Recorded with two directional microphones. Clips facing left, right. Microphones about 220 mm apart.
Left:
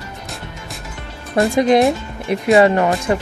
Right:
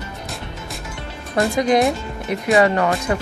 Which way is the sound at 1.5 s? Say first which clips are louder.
Left 4 dB; 25° left (ahead or behind).